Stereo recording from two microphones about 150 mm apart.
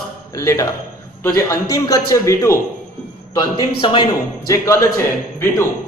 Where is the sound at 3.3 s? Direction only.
30° left (ahead or behind).